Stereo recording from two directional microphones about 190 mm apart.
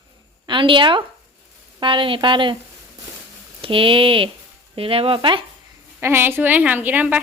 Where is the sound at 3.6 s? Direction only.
25° right (ahead or behind).